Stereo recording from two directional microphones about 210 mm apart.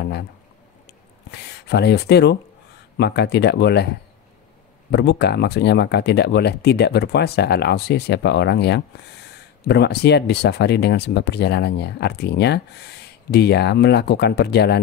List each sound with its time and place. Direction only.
1.3 s speech: 50° left (ahead or behind)
4.9 s speech: 50° left (ahead or behind)